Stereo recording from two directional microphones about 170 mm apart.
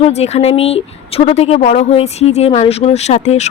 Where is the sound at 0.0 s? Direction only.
40° left (ahead or behind).